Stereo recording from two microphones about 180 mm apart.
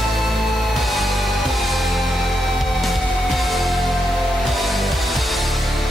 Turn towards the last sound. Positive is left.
turn(degrees=0)  # may be behind; listen again after turning